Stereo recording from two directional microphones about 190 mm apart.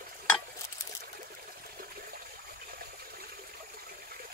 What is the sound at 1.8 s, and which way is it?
Toilet flush, 50° right (ahead or behind).